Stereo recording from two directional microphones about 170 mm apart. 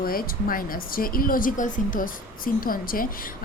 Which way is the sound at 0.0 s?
60° left (ahead or behind).